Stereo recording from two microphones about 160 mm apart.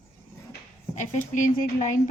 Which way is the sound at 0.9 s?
50° left (ahead or behind).